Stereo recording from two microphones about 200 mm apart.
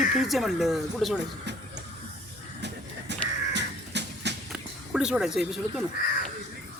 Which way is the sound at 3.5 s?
60° right (ahead or behind).